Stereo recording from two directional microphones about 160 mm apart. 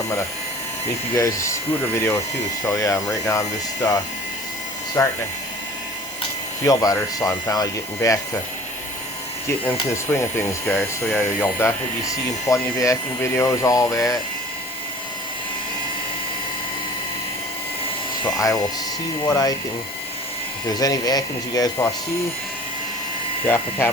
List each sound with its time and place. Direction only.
1.1 s speech: 15° left (ahead or behind)
6.7 s speech: 20° left (ahead or behind)
9.9 s speech: 15° left (ahead or behind)
18.3 s speech: 20° left (ahead or behind)
20.7 s speech: 25° left (ahead or behind)
23.5 s speech: 15° left (ahead or behind)